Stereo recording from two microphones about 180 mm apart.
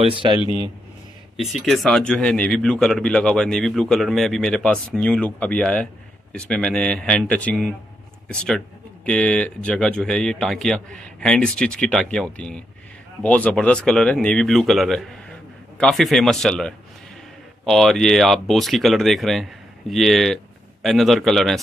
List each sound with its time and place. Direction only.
0.0 s a man's voice: 30° right (ahead or behind)
1.3 s speech: centre (ahead or behind)